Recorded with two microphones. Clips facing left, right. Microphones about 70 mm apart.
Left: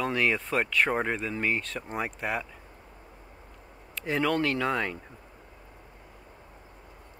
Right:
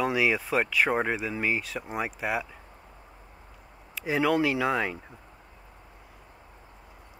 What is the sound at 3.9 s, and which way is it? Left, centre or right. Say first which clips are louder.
Speech: right 2 dB; centre.